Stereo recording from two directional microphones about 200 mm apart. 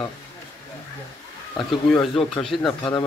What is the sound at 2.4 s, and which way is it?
Speech, 5° left (ahead or behind).